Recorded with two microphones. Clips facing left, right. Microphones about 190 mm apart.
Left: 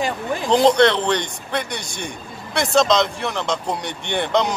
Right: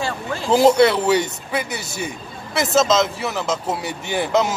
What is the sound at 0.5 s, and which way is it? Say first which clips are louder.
Speech: right 1 dB; 5° right (ahead or behind).